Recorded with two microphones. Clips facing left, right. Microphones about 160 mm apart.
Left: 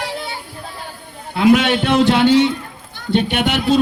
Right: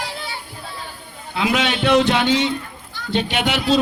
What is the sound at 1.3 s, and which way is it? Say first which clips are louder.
Speech: left 7 dB; 50° left (ahead or behind).